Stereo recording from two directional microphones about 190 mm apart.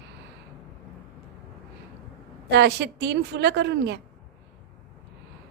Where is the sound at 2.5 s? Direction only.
60° right (ahead or behind).